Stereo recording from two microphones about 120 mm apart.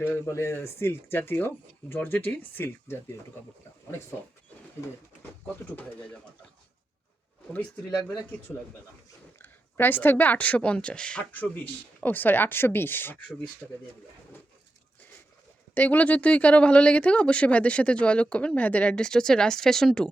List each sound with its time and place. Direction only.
0.0 s speech: 20° left (ahead or behind)
7.9 s speech: 5° left (ahead or behind)
13.6 s speech: centre (ahead or behind)
15.7 s speech: 15° left (ahead or behind)